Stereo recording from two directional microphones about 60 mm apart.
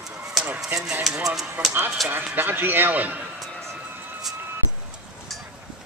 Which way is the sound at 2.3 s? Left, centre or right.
Right.